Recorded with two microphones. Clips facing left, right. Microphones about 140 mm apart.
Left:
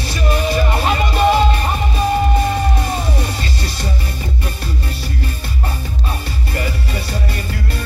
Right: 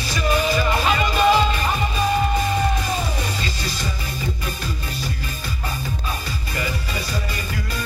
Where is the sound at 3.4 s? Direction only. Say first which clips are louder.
Left 3 dB; 60° left (ahead or behind).